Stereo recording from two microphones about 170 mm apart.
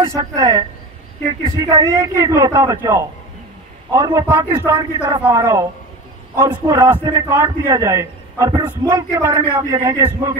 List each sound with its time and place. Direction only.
0.1 s a man's voice: 20° right (ahead or behind)